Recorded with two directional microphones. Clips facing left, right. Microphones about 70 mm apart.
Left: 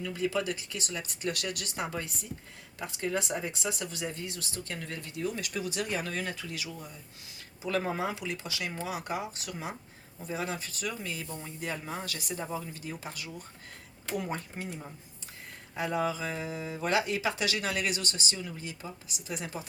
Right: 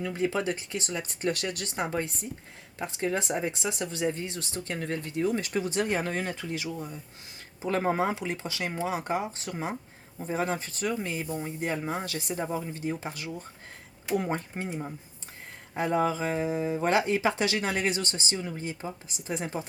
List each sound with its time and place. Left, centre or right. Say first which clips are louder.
0.0 s speech: right 3 dB; right